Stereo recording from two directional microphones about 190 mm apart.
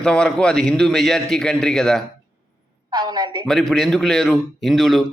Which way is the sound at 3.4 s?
Centre (ahead or behind).